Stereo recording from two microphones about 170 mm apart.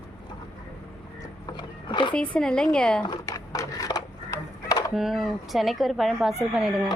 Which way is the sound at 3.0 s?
20° left (ahead or behind).